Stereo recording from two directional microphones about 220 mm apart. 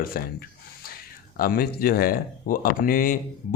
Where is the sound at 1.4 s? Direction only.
40° left (ahead or behind).